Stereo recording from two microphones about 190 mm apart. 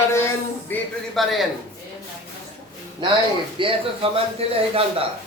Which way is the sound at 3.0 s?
25° right (ahead or behind).